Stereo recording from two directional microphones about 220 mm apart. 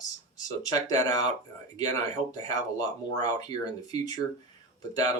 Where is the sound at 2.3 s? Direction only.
15° left (ahead or behind).